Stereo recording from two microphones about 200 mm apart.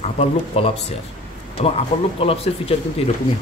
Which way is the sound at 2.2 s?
30° left (ahead or behind).